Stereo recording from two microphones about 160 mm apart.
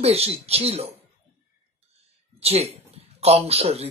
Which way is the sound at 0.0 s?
40° right (ahead or behind).